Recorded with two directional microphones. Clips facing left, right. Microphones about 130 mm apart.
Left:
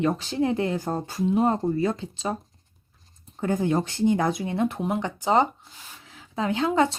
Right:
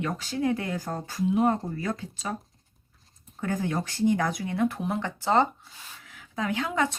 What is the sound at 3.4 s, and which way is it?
Speech, 25° left (ahead or behind).